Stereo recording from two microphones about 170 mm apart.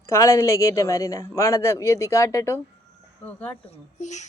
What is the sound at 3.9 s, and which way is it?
Speech, 45° left (ahead or behind).